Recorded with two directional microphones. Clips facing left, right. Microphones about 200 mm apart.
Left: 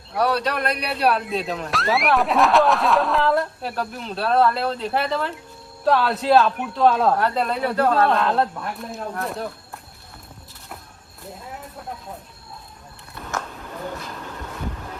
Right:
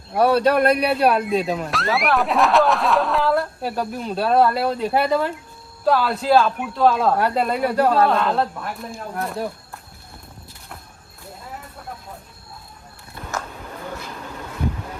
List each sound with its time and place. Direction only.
0.1 s speech: 50° right (ahead or behind)
1.5 s speech: 5° right (ahead or behind)